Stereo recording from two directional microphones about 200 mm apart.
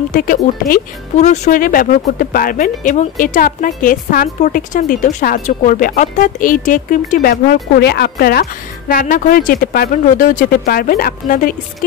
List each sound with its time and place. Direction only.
0.1 s speech: 45° left (ahead or behind)